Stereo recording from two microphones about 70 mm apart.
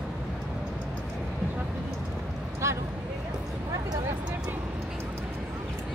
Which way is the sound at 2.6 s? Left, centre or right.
Right.